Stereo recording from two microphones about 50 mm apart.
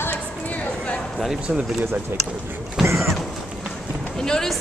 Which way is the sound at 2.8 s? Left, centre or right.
Right.